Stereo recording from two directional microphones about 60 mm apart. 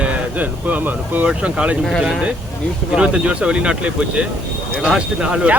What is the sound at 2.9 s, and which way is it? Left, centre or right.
Speech, centre.